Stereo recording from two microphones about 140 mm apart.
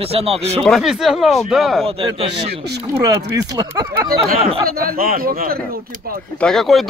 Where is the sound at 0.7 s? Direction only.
Centre (ahead or behind).